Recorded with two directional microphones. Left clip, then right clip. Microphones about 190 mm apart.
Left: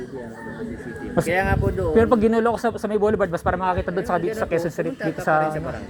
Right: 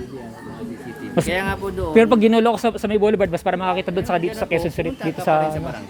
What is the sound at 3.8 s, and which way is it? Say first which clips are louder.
Speech: right 2 dB; 25° right (ahead or behind).